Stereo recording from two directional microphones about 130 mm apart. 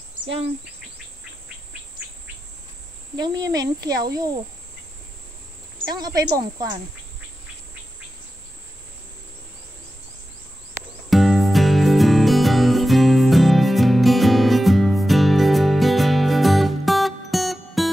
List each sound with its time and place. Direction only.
3.2 s a child's voice: 30° right (ahead or behind)
5.8 s speech: 30° right (ahead or behind)
11.1 s music: centre (ahead or behind)